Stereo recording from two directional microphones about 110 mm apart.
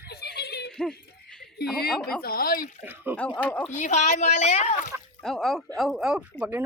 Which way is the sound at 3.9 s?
90° left.